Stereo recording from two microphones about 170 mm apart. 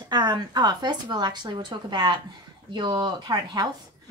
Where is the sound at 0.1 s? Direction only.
25° right (ahead or behind).